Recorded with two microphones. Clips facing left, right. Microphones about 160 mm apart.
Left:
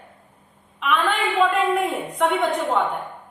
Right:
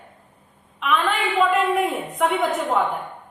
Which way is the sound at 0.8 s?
Centre (ahead or behind).